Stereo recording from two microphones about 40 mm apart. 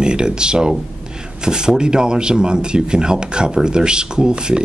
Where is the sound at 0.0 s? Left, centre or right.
Right.